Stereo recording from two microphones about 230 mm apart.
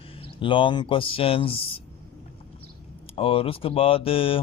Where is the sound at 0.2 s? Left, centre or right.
Left.